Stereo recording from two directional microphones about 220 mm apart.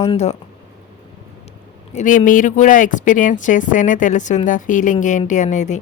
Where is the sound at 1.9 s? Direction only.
35° left (ahead or behind).